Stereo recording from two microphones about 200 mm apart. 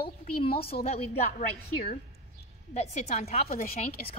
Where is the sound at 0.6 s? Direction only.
30° left (ahead or behind).